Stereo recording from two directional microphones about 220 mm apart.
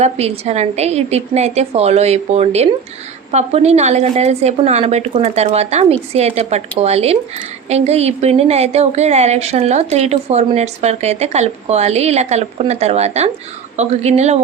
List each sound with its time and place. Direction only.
0.0 s a woman's voice: 30° right (ahead or behind)